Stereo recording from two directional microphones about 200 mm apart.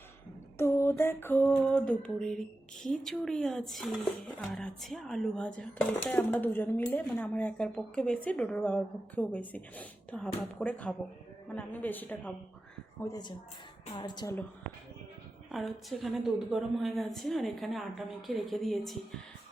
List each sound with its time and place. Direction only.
0.5 s a sound: 10° left (ahead or behind)
2.8 s a woman's voice: 5° left (ahead or behind); by 14.3 s 20° left (ahead or behind)
15.5 s speech: centre (ahead or behind)